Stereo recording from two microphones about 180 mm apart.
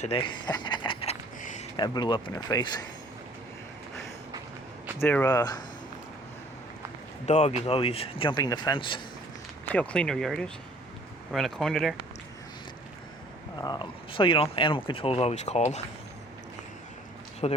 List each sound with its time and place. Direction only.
0.0 s speech: 30° left (ahead or behind)
1.4 s a sound: 45° left (ahead or behind)
1.7 s speech: 25° left (ahead or behind)
4.9 s speech: 10° left (ahead or behind)
7.3 s speech: 40° left (ahead or behind)
9.6 s speech: 5° left (ahead or behind)
13.6 s speech: 25° left (ahead or behind)
17.4 s speech: 30° left (ahead or behind)